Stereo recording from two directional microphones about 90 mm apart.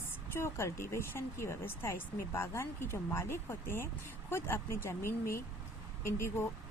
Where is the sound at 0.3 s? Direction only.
30° left (ahead or behind).